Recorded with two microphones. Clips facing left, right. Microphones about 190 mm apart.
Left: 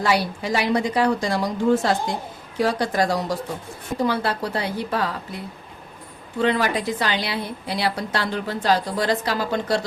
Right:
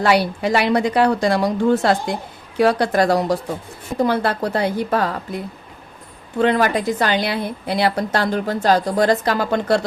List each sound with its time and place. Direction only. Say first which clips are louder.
0.0 s a woman's voice: right 5 dB; 65° right (ahead or behind)
4.0 s a woman's voice: right 4 dB; 50° right (ahead or behind)
6.4 s a woman's voice: right 4 dB; 50° right (ahead or behind)